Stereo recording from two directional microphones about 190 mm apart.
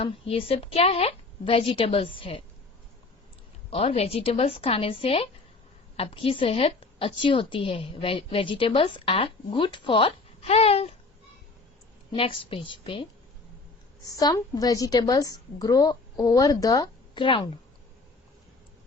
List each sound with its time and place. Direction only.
0.0 s a woman's voice: 30° left (ahead or behind)
3.7 s a woman's voice: 30° left (ahead or behind)
12.1 s a woman's voice: 30° left (ahead or behind)